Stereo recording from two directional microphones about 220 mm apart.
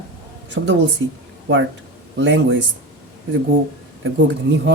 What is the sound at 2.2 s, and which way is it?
Speech, 55° right (ahead or behind).